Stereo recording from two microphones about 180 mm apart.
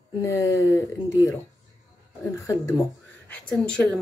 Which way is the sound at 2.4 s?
20° left (ahead or behind).